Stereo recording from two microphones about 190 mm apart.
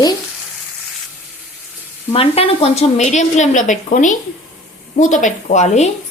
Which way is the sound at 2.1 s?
30° left (ahead or behind).